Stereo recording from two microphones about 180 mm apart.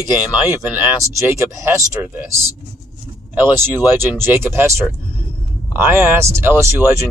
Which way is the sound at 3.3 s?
15° right (ahead or behind).